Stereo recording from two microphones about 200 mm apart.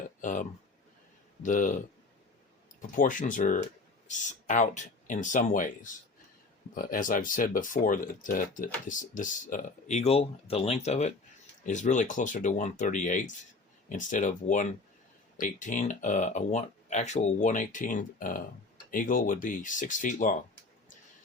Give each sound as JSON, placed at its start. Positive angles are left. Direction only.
{"t": 0.2, "sound": "speech", "side_deg": 40}
{"t": 2.9, "sound": "speech", "side_deg": 40}